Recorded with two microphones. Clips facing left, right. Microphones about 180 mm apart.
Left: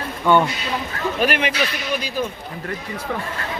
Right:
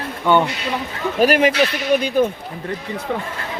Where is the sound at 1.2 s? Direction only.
40° right (ahead or behind).